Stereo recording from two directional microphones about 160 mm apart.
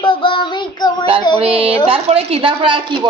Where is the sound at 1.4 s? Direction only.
35° right (ahead or behind).